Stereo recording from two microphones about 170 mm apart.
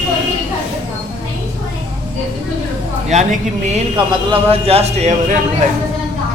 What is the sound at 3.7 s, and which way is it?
Speech, 30° right (ahead or behind).